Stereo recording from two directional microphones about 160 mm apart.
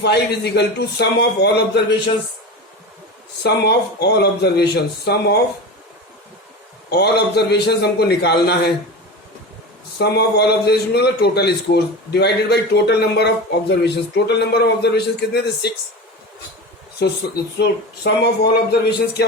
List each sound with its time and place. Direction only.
0.0 s a man's voice: 90° left
3.4 s a man's voice: 90° left
6.9 s a man's voice: 90° left
10.0 s a man's voice: 90° left
17.0 s a man's voice: 90° left